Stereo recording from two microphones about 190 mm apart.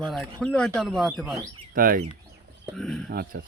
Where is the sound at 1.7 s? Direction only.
45° right (ahead or behind).